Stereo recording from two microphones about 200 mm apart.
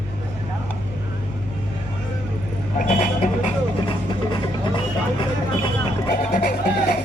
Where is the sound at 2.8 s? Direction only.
45° left (ahead or behind).